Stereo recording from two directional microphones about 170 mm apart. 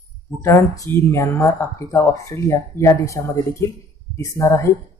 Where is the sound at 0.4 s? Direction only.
20° left (ahead or behind).